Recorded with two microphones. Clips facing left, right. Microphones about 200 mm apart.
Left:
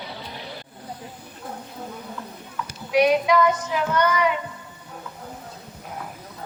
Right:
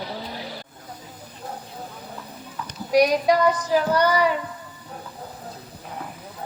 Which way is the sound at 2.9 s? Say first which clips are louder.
Right 1 dB; 40° right (ahead or behind).